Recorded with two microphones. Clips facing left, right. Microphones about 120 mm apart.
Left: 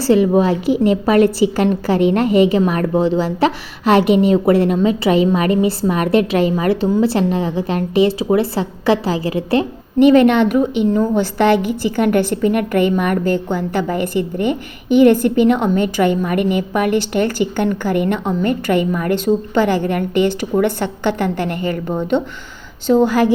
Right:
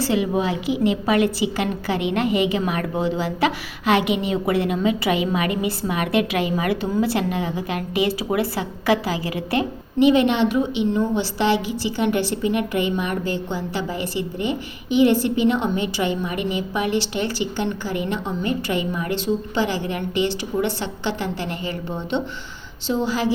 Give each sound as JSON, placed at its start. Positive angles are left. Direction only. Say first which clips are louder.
{"t": 0.0, "sound": "a woman's voice", "louder": "left 8 dB", "side_deg": 40}
{"t": 10.0, "sound": "a woman's voice", "louder": "left 6 dB", "side_deg": 50}